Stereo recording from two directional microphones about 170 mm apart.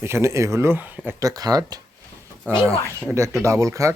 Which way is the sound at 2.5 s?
10° right (ahead or behind).